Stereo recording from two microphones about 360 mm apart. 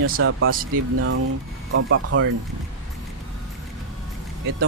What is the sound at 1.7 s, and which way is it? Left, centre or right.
Speech, right.